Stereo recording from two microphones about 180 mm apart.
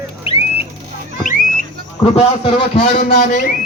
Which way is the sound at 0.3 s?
30° left (ahead or behind).